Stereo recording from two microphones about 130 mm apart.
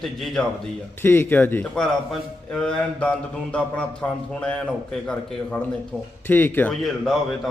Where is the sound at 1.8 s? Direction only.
5° left (ahead or behind).